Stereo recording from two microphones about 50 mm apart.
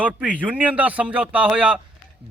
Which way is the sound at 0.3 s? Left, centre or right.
Right.